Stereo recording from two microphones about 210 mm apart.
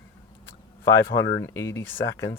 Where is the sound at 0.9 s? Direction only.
60° left (ahead or behind).